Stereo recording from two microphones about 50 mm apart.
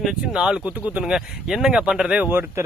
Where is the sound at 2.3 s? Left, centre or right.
Right.